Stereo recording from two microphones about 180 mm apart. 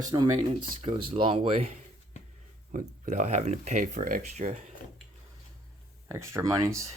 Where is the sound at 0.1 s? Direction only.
25° right (ahead or behind).